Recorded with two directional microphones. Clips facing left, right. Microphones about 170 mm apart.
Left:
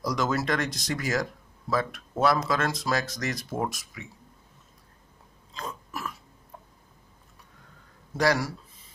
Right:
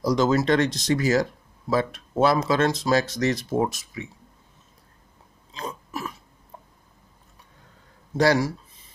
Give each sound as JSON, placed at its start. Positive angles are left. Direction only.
{"t": 0.0, "sound": "speech", "side_deg": -30}
{"t": 5.5, "sound": "burping", "side_deg": -20}
{"t": 8.2, "sound": "speech", "side_deg": -30}